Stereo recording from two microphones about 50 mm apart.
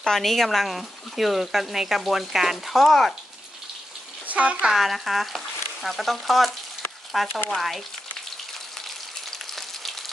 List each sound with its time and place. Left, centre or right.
0.0 s speech: centre
4.3 s speech: right
4.7 s speech: centre